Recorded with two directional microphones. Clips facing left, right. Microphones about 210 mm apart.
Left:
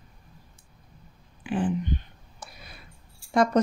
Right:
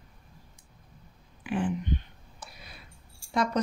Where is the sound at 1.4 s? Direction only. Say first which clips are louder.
Left 2 dB; 30° left (ahead or behind).